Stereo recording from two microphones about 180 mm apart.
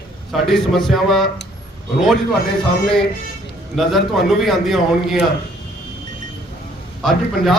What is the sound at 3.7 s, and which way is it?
A man's voice, centre (ahead or behind).